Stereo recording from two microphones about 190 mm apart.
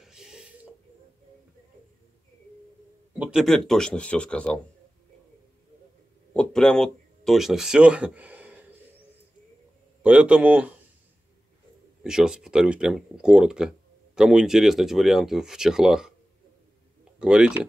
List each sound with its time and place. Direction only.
0.0 s a sound: 5° right (ahead or behind)
3.1 s speech: 5° right (ahead or behind)
6.3 s a sound: 5° left (ahead or behind)
10.0 s speech: 5° right (ahead or behind)
12.0 s speech: 5° right (ahead or behind)
17.2 s speech: 5° right (ahead or behind)